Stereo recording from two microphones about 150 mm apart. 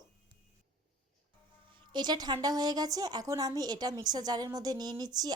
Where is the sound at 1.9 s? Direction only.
30° right (ahead or behind).